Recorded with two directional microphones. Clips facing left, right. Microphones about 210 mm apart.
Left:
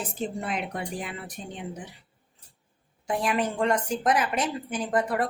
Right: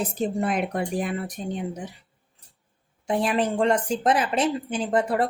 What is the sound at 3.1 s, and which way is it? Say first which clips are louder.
A woman's voice: right 3 dB; 25° right (ahead or behind).